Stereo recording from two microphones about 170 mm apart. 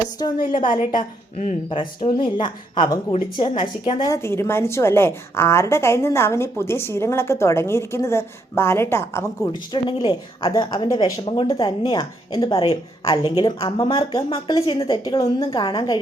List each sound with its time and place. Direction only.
0.3 s a woman's voice: 60° left (ahead or behind)
0.9 s a woman's voice: 35° left (ahead or behind)
12.5 s a woman's voice: 35° left (ahead or behind)